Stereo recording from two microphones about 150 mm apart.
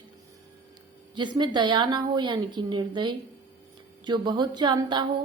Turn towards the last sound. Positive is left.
turn(degrees=-30)  # may be behind; listen again after turning